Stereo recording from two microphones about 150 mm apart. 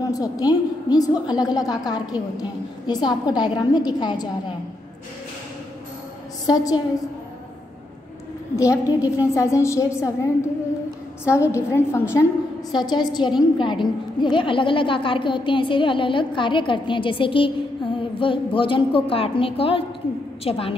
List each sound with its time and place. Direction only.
0.0 s a woman's voice: 25° left (ahead or behind)
6.4 s a woman's voice: 25° left (ahead or behind)
8.5 s a woman's voice: 20° left (ahead or behind)
12.7 s a woman's voice: 30° left (ahead or behind)